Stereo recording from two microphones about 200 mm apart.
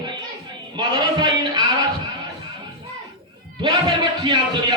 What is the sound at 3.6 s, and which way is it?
Speech, 25° right (ahead or behind).